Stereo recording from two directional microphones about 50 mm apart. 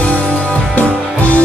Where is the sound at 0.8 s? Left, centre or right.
Left.